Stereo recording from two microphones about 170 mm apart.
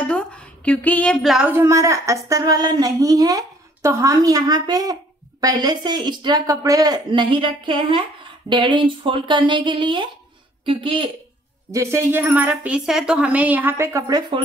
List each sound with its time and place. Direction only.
0.0 s a sound: 5° left (ahead or behind)
1.5 s speech: 15° right (ahead or behind)
11.7 s speech: 15° right (ahead or behind)